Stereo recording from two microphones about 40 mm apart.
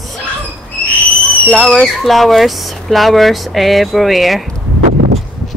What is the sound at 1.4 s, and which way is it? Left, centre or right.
Speech, left.